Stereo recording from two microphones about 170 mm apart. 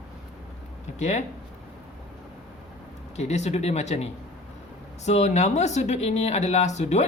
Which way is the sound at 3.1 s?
40° left (ahead or behind).